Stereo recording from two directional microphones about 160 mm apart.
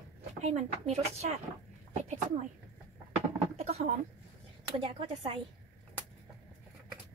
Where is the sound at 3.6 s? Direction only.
40° right (ahead or behind).